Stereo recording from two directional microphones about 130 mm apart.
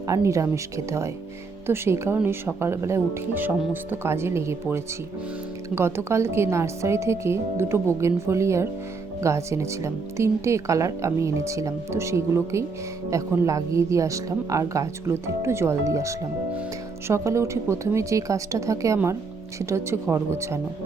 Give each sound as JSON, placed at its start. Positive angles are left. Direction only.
{"t": 0.1, "sound": "speech", "side_deg": -25}